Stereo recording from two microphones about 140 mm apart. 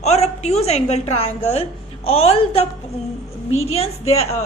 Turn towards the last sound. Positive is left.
turn(degrees=50)  # may be behind; listen again after turning